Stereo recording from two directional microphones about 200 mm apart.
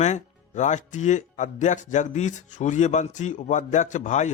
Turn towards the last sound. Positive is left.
turn(degrees=35)  # may be behind; listen again after turning